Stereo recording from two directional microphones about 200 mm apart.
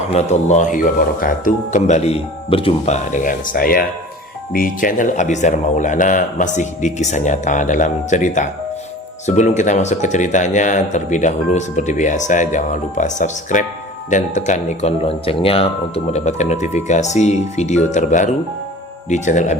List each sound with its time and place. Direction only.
0.1 s speech: 35° left (ahead or behind)